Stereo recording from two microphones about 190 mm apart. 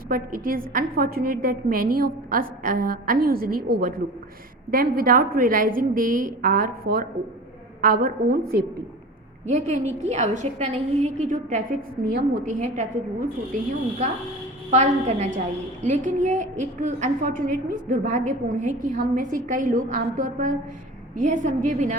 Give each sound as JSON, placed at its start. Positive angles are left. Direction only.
{"t": 0.1, "sound": "a woman's voice", "side_deg": -50}
{"t": 9.5, "sound": "a woman's voice", "side_deg": -40}
{"t": 14.7, "sound": "a woman's voice", "side_deg": -35}